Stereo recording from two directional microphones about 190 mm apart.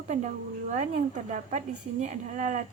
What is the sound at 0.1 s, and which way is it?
A woman's voice, 40° right (ahead or behind).